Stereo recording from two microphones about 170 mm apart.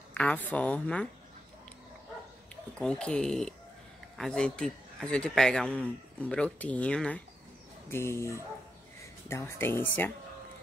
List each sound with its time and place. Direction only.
0.1 s a man's voice: 10° left (ahead or behind)
2.5 s a man's voice: 5° left (ahead or behind)